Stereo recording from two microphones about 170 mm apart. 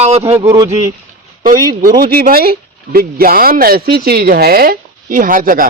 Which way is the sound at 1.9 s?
60° right (ahead or behind).